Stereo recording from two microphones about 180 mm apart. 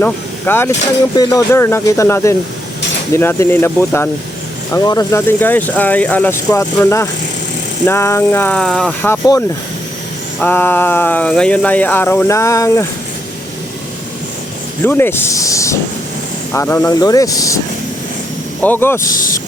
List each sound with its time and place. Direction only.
0.0 s speech: 10° left (ahead or behind)
10.4 s speech: 10° left (ahead or behind)
14.8 s speech: 10° left (ahead or behind)
18.6 s speech: 10° left (ahead or behind)